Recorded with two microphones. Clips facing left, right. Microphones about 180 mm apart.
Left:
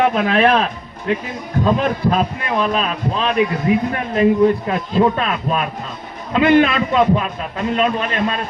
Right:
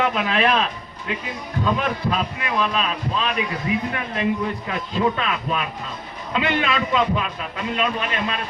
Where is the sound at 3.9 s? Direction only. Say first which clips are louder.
Left 8 dB; 40° left (ahead or behind).